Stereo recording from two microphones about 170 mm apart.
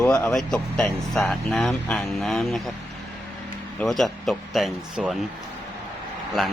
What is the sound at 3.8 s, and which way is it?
Speech, centre (ahead or behind).